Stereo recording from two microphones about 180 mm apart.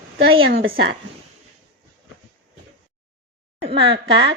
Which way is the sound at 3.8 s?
70° right (ahead or behind).